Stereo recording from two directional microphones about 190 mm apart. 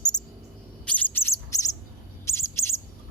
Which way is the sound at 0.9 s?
10° left (ahead or behind).